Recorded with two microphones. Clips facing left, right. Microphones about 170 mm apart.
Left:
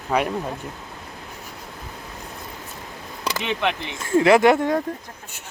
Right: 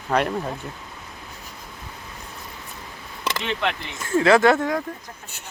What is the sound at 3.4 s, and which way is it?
Speech, 15° left (ahead or behind).